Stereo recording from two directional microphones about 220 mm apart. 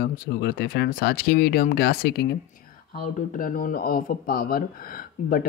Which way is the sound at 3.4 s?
40° left (ahead or behind).